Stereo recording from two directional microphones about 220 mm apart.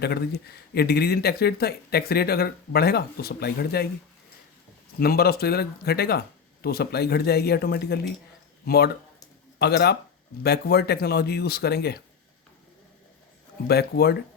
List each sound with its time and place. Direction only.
0.0 s speech: 45° left (ahead or behind)
4.9 s speech: 45° left (ahead or behind)
13.7 s speech: 45° left (ahead or behind)